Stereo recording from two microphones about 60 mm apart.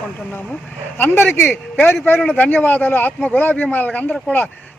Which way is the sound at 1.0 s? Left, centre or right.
Left.